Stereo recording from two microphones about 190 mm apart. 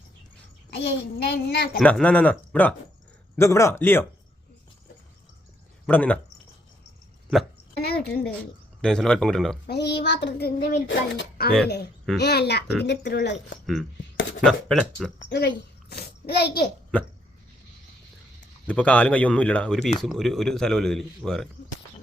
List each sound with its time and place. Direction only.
0.7 s child singing: 60° left (ahead or behind)
1.8 s speech: 5° left (ahead or behind)
5.8 s speech: 10° left (ahead or behind)
7.8 s a woman's voice: 55° left (ahead or behind)
8.8 s speech: 5° left (ahead or behind)
9.6 s child singing: 60° left (ahead or behind)
10.8 s child singing: 60° left (ahead or behind)
14.4 s speech: 5° left (ahead or behind)
15.3 s a child's voice: 65° left (ahead or behind)
18.7 s speech: 5° left (ahead or behind)